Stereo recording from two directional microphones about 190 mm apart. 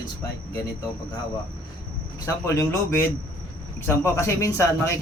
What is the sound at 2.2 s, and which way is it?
A man's voice, 15° left (ahead or behind).